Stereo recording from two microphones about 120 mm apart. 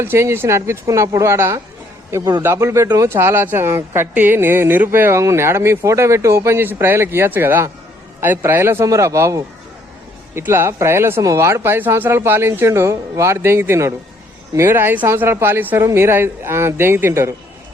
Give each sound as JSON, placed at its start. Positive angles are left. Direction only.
{"t": 0.0, "sound": "a man's voice", "side_deg": -20}